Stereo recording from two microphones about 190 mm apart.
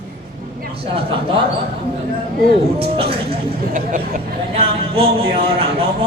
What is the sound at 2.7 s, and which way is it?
Speech, 30° right (ahead or behind).